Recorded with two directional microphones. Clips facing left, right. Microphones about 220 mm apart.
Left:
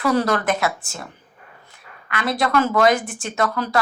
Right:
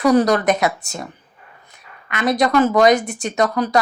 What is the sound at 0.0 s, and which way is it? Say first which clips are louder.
Speech: right 5 dB; 20° right (ahead or behind).